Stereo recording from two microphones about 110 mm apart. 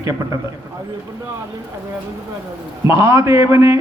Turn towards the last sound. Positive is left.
turn(degrees=-25)  # may be behind; listen again after turning